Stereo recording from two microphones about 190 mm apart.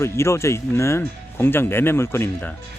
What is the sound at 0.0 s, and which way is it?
Speech, 15° left (ahead or behind).